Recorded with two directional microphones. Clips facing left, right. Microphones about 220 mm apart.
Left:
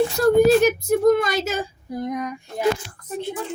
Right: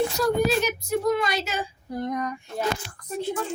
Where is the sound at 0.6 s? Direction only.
50° left (ahead or behind).